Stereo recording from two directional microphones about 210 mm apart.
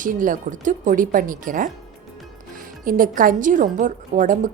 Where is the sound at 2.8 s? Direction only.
40° right (ahead or behind).